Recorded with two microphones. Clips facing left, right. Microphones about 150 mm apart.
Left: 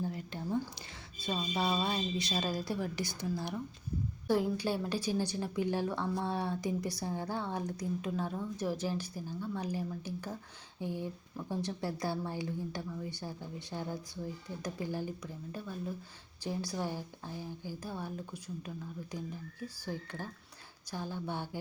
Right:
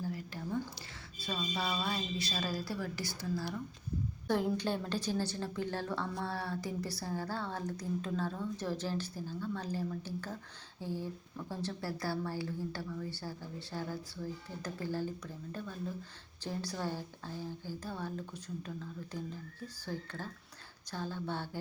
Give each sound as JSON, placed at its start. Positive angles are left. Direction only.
{"t": 0.0, "sound": "a woman's voice", "side_deg": 25}
{"t": 4.3, "sound": "a woman's voice", "side_deg": 5}